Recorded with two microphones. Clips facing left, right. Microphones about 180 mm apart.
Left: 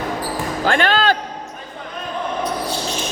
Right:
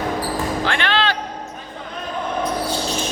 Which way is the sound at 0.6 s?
45° left (ahead or behind).